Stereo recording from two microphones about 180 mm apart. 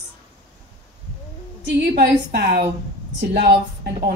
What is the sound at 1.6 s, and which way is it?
Speech, 65° right (ahead or behind).